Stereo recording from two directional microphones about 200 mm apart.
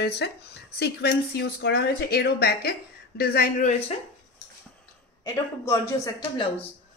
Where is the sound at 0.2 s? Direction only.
55° left (ahead or behind).